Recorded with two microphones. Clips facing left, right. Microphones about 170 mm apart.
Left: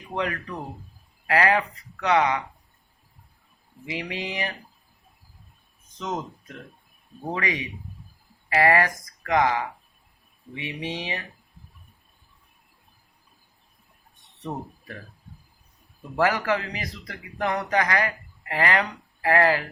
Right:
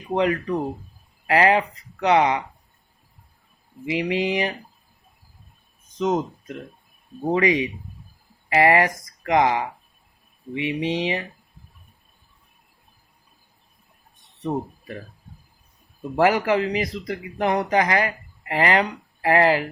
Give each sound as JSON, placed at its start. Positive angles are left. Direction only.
{"t": 0.2, "sound": "speech", "side_deg": -20}
{"t": 3.8, "sound": "speech", "side_deg": -20}
{"t": 6.0, "sound": "speech", "side_deg": -20}
{"t": 7.3, "sound": "speech", "side_deg": -20}
{"t": 14.4, "sound": "speech", "side_deg": -20}
{"t": 16.1, "sound": "speech", "side_deg": -20}